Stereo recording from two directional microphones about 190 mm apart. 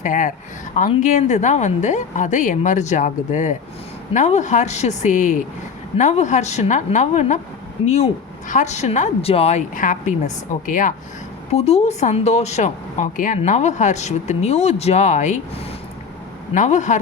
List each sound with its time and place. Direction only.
0.0 s speech: 40° left (ahead or behind)